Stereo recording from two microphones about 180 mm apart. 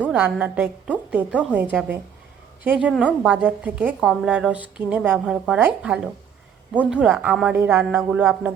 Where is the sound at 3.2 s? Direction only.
10° right (ahead or behind).